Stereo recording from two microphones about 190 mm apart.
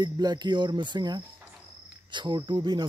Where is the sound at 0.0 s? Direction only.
20° right (ahead or behind).